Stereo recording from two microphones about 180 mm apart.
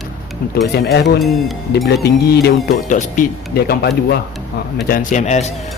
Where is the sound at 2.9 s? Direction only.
45° left (ahead or behind); by 3.9 s 60° left (ahead or behind).